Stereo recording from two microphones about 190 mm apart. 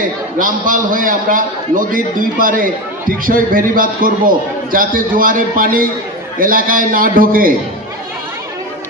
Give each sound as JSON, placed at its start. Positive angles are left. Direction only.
{"t": 0.4, "sound": "a man's voice", "side_deg": -45}